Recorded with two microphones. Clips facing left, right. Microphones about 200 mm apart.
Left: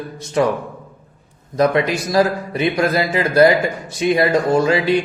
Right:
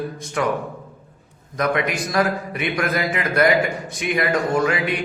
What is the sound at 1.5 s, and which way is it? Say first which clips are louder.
A man's voice: left 6 dB; 30° left (ahead or behind).